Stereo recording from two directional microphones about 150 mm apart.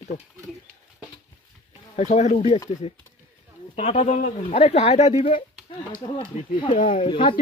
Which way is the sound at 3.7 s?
45° left (ahead or behind).